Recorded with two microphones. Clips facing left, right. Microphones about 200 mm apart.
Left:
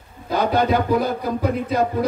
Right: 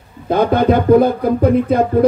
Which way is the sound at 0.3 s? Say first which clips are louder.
Right 6 dB; 55° right (ahead or behind).